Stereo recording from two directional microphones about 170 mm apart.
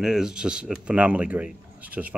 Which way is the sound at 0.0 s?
5° right (ahead or behind).